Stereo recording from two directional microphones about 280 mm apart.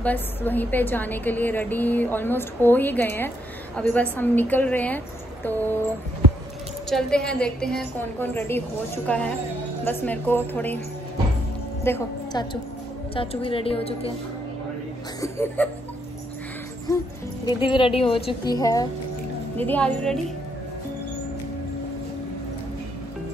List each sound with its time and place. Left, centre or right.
0.0 s a woman's voice: centre
6.9 s a woman's voice: centre
11.8 s a woman's voice: centre
15.1 s a woman's voice: centre
17.5 s a woman's voice: centre